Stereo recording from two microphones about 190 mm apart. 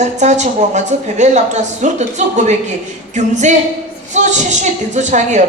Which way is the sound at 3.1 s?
40° right (ahead or behind).